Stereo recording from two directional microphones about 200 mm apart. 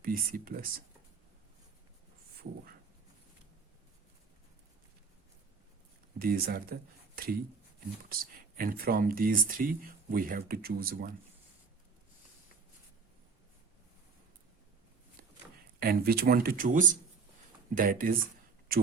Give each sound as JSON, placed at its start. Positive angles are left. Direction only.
{"t": 0.0, "sound": "speech", "side_deg": -45}
{"t": 6.1, "sound": "speech", "side_deg": -45}
{"t": 8.1, "sound": "speech", "side_deg": -45}
{"t": 15.8, "sound": "speech", "side_deg": -50}